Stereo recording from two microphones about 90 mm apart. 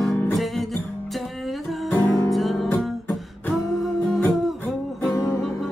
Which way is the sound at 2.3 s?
Centre (ahead or behind).